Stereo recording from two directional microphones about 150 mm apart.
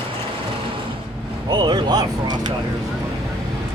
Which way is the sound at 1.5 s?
30° right (ahead or behind).